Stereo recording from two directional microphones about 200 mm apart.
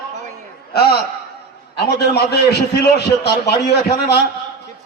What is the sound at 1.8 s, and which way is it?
A man's voice, 55° left (ahead or behind).